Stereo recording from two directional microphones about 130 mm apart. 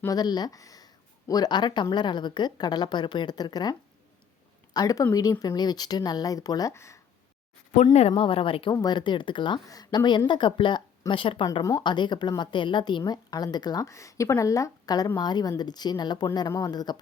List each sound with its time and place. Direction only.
0.1 s a woman's voice: 30° left (ahead or behind)
7.9 s speech: 50° left (ahead or behind)
8.7 s a woman's voice: 30° left (ahead or behind)